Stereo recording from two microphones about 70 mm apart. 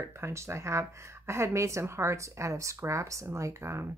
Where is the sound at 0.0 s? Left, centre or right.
Right.